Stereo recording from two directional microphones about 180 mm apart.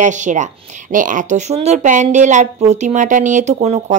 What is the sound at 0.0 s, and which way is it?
A woman's voice, 45° right (ahead or behind).